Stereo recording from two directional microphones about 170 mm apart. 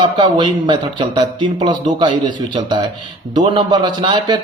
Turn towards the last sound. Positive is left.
turn(degrees=-25)  # may be behind; listen again after turning